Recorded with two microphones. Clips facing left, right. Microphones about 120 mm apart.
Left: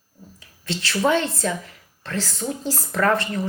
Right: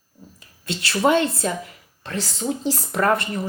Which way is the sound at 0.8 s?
15° right (ahead or behind).